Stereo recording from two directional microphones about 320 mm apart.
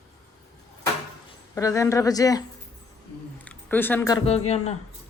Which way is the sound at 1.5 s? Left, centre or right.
Centre.